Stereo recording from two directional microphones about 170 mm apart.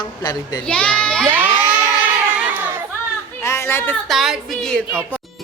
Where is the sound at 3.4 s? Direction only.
15° left (ahead or behind).